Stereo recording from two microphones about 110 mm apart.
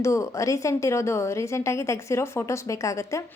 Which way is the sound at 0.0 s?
30° left (ahead or behind).